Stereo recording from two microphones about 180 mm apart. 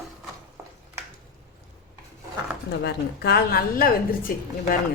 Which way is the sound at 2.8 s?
65° left (ahead or behind).